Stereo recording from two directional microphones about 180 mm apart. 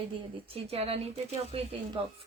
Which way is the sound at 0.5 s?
35° right (ahead or behind).